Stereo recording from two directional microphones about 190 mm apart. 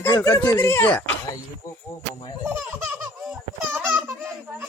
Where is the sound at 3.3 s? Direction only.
5° right (ahead or behind).